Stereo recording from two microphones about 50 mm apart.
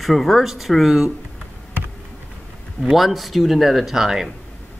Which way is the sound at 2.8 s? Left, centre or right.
Centre.